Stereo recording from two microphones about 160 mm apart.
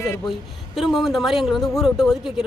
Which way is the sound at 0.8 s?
Centre (ahead or behind).